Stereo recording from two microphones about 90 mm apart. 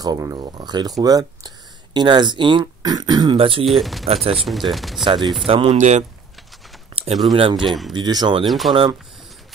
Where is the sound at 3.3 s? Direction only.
85° right.